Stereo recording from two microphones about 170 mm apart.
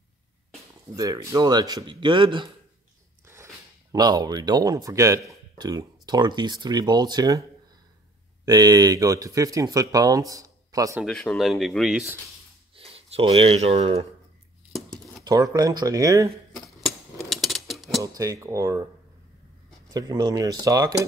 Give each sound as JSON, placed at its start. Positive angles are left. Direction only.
{"t": 0.9, "sound": "speech", "side_deg": -20}
{"t": 3.9, "sound": "speech", "side_deg": -20}
{"t": 8.5, "sound": "speech", "side_deg": -20}
{"t": 11.0, "sound": "speech", "side_deg": 0}
{"t": 12.7, "sound": "speech", "side_deg": -35}
{"t": 15.2, "sound": "speech", "side_deg": -20}
{"t": 16.5, "sound": "cutlery", "side_deg": 0}
{"t": 17.3, "sound": "a sound", "side_deg": 0}
{"t": 18.0, "sound": "speech", "side_deg": -20}
{"t": 19.9, "sound": "speech", "side_deg": -20}